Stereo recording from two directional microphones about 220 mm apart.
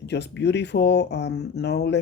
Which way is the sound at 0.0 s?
50° left (ahead or behind).